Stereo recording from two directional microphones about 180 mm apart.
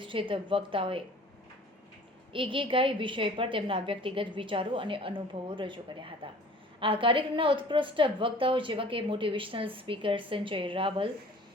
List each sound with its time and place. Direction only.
0.0 s a woman's voice: 30° right (ahead or behind)
2.3 s a woman's voice: 30° right (ahead or behind)